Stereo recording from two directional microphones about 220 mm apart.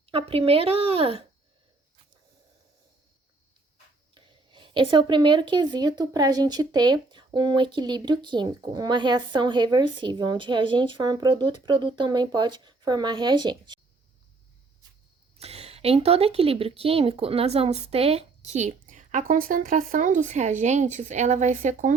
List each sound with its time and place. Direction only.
0.0 s speech: 25° right (ahead or behind)
4.1 s speech: 20° right (ahead or behind)
15.4 s a woman's voice: 30° right (ahead or behind)